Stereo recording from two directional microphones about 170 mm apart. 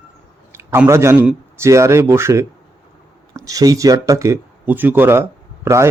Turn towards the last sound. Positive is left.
turn(degrees=-15)  # may be behind; listen again after turning